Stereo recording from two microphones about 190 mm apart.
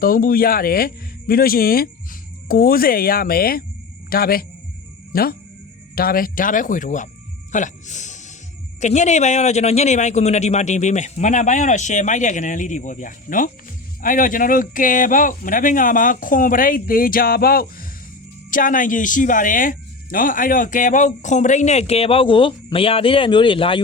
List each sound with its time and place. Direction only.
0.0 s speech: 50° left (ahead or behind)
7.5 s music: 40° left (ahead or behind)
8.8 s speech: 40° left (ahead or behind)